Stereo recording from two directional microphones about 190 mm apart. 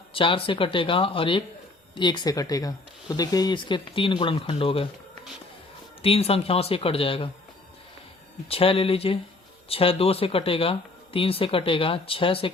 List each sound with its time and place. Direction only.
0.1 s speech: 30° left (ahead or behind)
6.0 s speech: 30° left (ahead or behind)
8.4 s speech: 30° left (ahead or behind)